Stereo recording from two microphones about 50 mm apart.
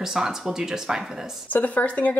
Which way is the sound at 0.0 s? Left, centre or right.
Centre.